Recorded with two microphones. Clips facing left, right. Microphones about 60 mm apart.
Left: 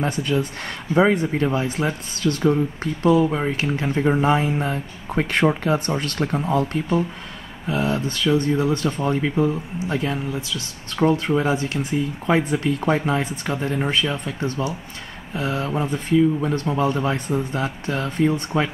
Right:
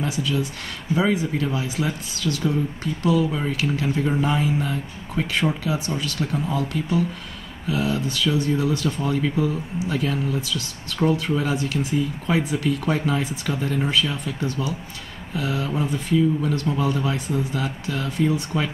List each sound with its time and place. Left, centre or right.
0.0 s speech: left; by 11.1 s centre
11.1 s speech: left
16.7 s speech: left